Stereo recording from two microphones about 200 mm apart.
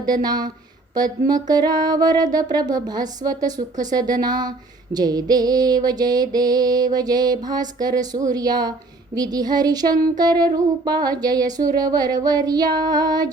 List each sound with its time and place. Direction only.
0.0 s music: 20° right (ahead or behind)